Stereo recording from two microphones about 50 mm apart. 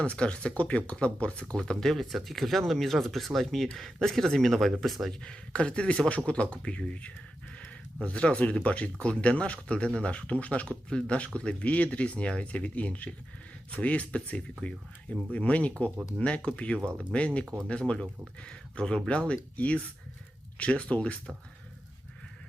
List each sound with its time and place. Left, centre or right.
0.0 s speech: left
1.5 s speech: centre
5.2 s speech: centre